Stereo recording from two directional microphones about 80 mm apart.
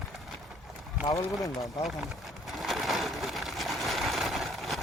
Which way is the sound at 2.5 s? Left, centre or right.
Centre.